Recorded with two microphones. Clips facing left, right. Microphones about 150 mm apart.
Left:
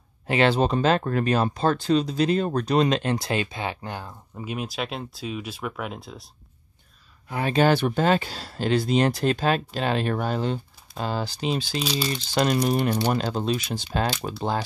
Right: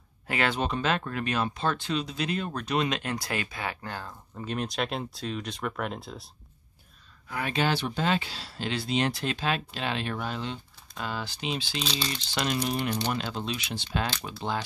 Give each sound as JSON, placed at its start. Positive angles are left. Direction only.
{"t": 0.3, "sound": "speech", "side_deg": 30}
{"t": 7.2, "sound": "speech", "side_deg": 25}
{"t": 7.5, "sound": "speech", "side_deg": 50}
{"t": 11.8, "sound": "speech", "side_deg": 10}
{"t": 12.6, "sound": "speech", "side_deg": 45}